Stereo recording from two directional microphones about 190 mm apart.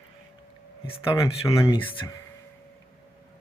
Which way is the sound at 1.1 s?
15° left (ahead or behind).